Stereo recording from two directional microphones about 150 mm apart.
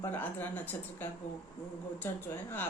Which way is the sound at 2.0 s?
15° left (ahead or behind).